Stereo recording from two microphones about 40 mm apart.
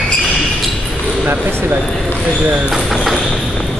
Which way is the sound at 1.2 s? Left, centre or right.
Right.